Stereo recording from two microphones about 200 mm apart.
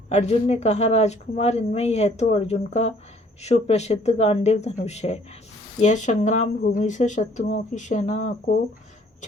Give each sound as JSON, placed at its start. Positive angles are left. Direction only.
{"t": 0.1, "sound": "speech", "side_deg": 35}